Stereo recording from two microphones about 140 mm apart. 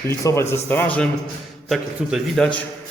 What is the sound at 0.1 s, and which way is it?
A man's voice, 20° left (ahead or behind).